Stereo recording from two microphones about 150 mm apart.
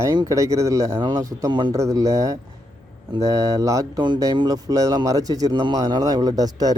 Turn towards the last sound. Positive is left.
turn(degrees=-25)  # may be behind; listen again after turning